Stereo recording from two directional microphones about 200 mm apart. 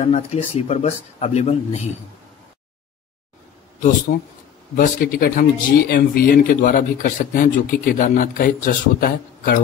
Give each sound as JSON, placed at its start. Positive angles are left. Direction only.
{"t": 0.0, "sound": "speech", "side_deg": 30}
{"t": 4.1, "sound": "speech", "side_deg": 45}